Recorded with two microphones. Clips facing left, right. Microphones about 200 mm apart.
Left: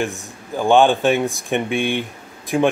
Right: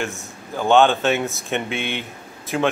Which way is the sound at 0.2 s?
15° left (ahead or behind).